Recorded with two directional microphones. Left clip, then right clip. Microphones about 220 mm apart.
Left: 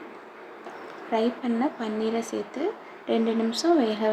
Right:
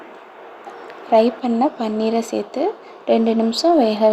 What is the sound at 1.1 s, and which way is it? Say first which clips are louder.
Speech: right 11 dB; 20° right (ahead or behind).